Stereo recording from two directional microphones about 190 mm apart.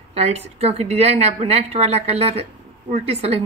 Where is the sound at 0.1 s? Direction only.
35° right (ahead or behind).